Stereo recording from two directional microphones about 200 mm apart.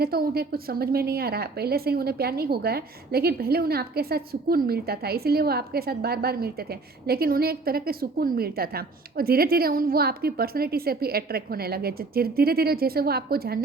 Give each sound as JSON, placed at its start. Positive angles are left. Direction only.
{"t": 0.0, "sound": "a woman's voice", "side_deg": -50}